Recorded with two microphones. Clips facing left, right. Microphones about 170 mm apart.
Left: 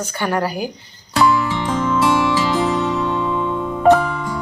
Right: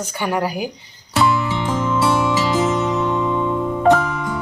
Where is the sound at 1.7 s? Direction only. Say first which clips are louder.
Left 1 dB; 5° right (ahead or behind).